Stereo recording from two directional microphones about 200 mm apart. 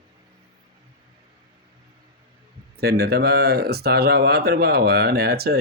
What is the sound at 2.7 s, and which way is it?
Speech, 55° right (ahead or behind).